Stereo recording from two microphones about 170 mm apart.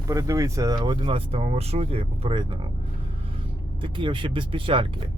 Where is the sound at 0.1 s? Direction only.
20° right (ahead or behind).